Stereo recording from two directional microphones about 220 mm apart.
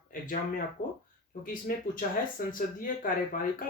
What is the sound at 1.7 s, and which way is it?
Speech, 40° left (ahead or behind).